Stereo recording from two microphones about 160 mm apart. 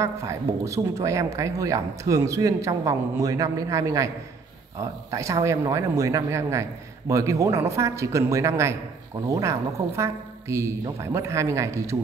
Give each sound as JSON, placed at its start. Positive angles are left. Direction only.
{"t": 0.0, "sound": "a woman's voice", "side_deg": -20}